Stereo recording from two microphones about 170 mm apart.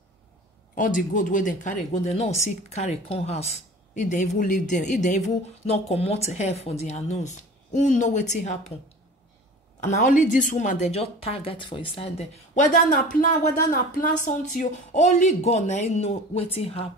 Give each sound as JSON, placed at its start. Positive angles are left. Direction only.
{"t": 0.7, "sound": "speech", "side_deg": 50}
{"t": 9.8, "sound": "a woman's voice", "side_deg": 45}
{"t": 12.5, "sound": "speech", "side_deg": 50}